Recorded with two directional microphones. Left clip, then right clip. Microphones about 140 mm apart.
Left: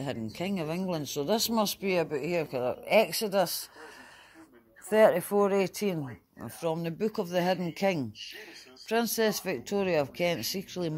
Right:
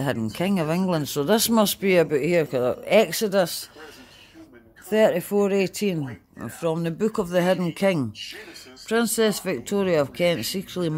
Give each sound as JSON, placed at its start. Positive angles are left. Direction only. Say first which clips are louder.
{"t": 0.2, "sound": "speech", "louder": "right 9 dB", "side_deg": -40}
{"t": 4.8, "sound": "speech", "louder": "right 2 dB", "side_deg": -10}
{"t": 8.4, "sound": "speech", "louder": "right 6 dB", "side_deg": -10}